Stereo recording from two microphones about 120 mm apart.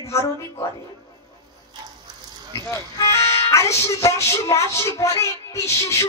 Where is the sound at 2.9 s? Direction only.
25° left (ahead or behind).